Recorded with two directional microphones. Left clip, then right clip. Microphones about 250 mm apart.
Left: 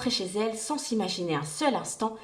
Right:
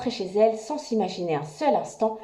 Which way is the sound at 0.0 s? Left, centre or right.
Centre.